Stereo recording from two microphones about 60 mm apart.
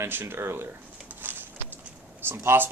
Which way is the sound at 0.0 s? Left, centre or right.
Right.